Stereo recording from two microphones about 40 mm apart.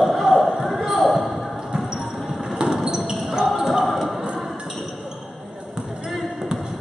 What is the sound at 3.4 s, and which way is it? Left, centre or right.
Basketball bounce, centre.